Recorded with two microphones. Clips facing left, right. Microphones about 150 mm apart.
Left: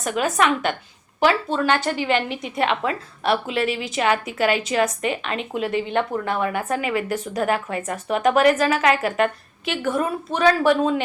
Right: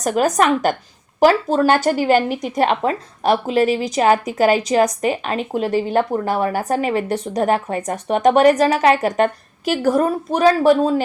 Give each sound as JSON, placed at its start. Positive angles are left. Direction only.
{"t": 0.0, "sound": "a woman's voice", "side_deg": -40}